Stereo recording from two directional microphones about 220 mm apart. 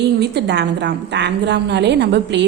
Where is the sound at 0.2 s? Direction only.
50° right (ahead or behind).